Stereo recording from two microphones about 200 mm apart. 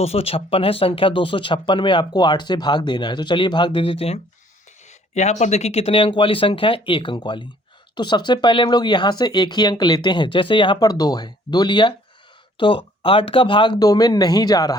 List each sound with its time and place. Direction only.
0.0 s speech: 30° left (ahead or behind)